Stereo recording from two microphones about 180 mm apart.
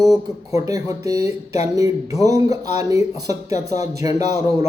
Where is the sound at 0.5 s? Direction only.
15° right (ahead or behind).